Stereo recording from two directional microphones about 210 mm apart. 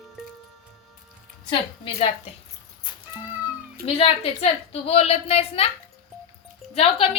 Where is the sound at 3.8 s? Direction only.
30° left (ahead or behind).